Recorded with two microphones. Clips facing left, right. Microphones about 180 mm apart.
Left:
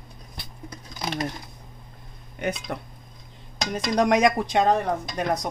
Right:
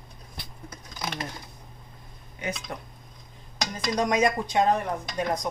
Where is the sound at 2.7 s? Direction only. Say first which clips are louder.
Left 4 dB; 60° left (ahead or behind).